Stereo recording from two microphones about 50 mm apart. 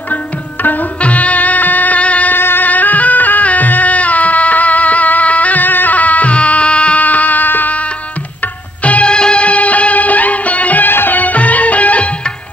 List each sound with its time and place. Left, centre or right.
0.1 s tabla: left
2.3 s music: left
8.8 s music: left